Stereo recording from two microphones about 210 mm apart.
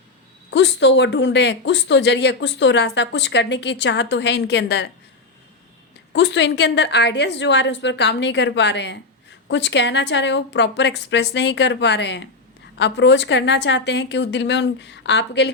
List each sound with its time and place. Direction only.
0.5 s a woman's voice: 60° left (ahead or behind)
6.1 s a woman's voice: 55° left (ahead or behind)